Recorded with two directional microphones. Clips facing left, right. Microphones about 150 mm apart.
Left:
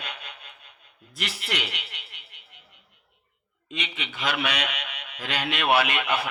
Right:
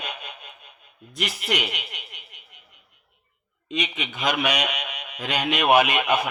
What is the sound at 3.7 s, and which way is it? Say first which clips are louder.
A man's voice: right 6 dB; 15° right (ahead or behind).